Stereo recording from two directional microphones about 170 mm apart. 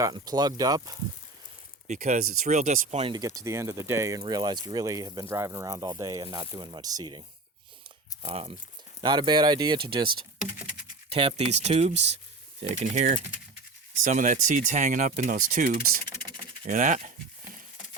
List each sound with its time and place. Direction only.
0.0 s speech: 25° right (ahead or behind)
1.9 s speech: 45° right (ahead or behind)
3.1 s speech: 20° right (ahead or behind); by 17.1 s 50° right (ahead or behind)